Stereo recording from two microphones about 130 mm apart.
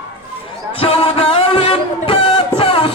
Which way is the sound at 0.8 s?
50° left (ahead or behind).